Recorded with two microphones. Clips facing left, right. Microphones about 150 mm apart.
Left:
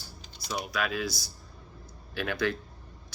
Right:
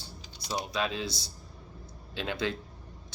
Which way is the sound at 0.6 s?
25° right (ahead or behind).